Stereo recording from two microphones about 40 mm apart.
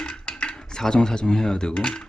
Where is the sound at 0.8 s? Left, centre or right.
Centre.